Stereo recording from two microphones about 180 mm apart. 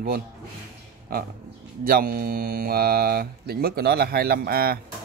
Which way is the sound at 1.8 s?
55° right (ahead or behind).